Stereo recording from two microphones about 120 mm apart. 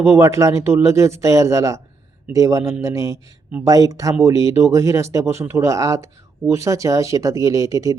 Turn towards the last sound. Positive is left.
turn(degrees=-25)  # may be behind; listen again after turning